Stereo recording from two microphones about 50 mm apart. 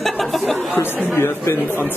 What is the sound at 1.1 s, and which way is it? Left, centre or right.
Speech, left.